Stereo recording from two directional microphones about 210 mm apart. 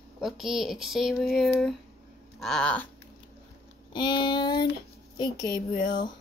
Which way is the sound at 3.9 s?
20° left (ahead or behind).